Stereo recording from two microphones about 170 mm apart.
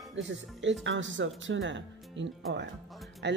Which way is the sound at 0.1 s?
90° right.